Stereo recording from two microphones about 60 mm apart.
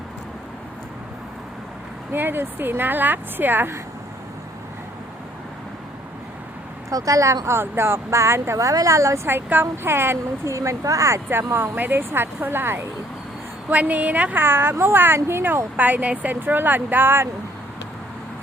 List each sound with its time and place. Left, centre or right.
2.1 s a woman's voice: right
6.9 s speech: right
8.5 s speech: right
9.2 s a woman's voice: right
10.4 s speech: right
11.5 s a woman's voice: right
13.7 s a woman's voice: right
15.8 s a woman's voice: right